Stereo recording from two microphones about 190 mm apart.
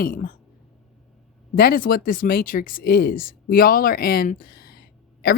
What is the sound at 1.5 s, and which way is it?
Speech, 50° left (ahead or behind).